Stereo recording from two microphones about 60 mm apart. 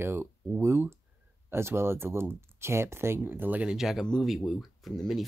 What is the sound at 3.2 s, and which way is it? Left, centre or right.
Speech, right.